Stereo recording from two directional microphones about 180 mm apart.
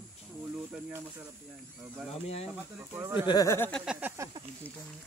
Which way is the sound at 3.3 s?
20° left (ahead or behind).